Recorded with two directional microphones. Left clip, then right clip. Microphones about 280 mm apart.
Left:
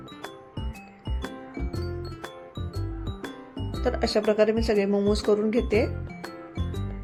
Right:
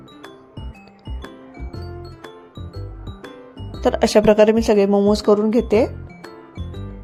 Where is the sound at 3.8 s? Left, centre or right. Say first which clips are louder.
Right 10 dB; right.